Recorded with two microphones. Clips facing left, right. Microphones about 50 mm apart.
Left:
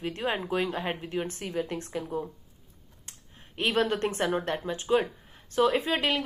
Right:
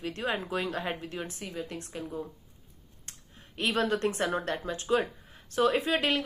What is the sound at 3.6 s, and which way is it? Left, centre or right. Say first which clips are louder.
A woman's voice: left 2 dB; left.